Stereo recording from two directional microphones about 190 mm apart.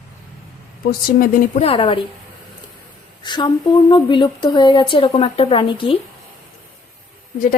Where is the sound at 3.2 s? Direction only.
25° left (ahead or behind).